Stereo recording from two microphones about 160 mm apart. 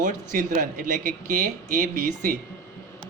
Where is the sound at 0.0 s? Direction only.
55° right (ahead or behind).